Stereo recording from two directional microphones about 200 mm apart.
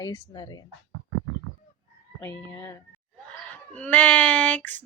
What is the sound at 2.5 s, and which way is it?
Speech, 10° left (ahead or behind).